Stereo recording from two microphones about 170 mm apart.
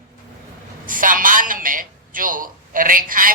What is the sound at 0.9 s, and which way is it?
A woman's voice, 50° right (ahead or behind).